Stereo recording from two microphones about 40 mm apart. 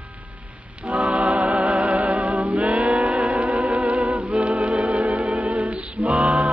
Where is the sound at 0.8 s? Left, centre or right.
Right.